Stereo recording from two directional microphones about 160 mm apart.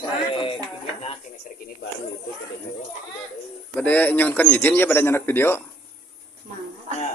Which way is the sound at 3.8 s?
10° left (ahead or behind).